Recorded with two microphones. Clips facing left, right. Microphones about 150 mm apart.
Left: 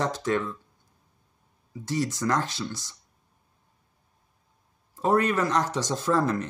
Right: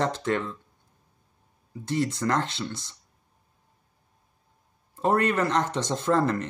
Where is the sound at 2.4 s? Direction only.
25° right (ahead or behind).